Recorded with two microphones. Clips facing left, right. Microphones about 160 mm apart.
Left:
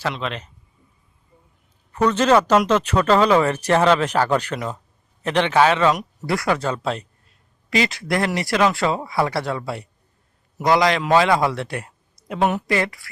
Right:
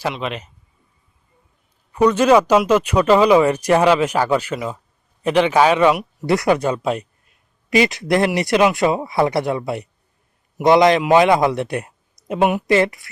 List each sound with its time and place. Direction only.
0.1 s speech: 10° right (ahead or behind)
1.9 s speech: 10° right (ahead or behind)